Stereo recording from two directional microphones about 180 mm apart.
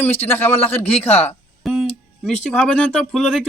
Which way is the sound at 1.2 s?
Centre (ahead or behind).